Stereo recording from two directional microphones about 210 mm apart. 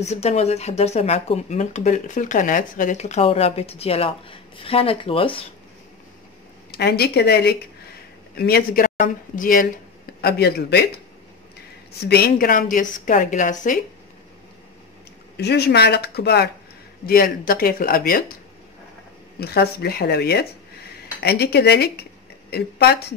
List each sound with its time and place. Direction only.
0.0 s speech: 30° left (ahead or behind)
6.7 s speech: 50° left (ahead or behind)
12.1 s speech: 45° left (ahead or behind)
15.3 s speech: 50° left (ahead or behind)
19.4 s speech: 50° left (ahead or behind)